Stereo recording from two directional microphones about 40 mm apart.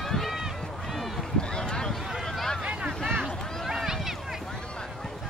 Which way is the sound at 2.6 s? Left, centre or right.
Right.